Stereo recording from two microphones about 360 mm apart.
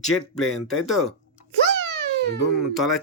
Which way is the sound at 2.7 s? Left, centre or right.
Centre.